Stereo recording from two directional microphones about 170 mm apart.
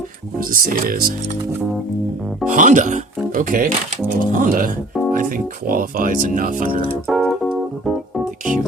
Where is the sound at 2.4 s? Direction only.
50° right (ahead or behind).